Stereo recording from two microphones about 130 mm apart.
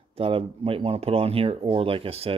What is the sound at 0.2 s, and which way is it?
Speech, 45° right (ahead or behind).